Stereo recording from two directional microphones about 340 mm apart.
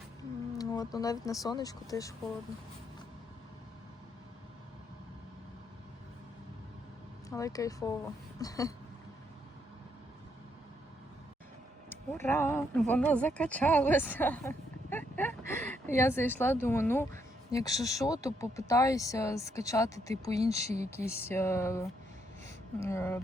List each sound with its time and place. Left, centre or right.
0.6 s a sound: centre
0.9 s a woman's voice: centre
7.3 s a woman's voice: centre
11.9 s a woman's voice: centre
20.4 s speech: centre
21.2 s a woman's voice: centre
22.9 s a woman's voice: centre